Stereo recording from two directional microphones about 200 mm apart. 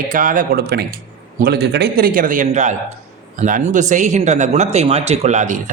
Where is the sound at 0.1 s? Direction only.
40° right (ahead or behind).